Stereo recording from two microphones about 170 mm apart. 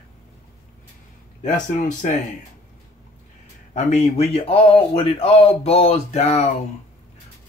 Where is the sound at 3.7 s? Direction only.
40° left (ahead or behind).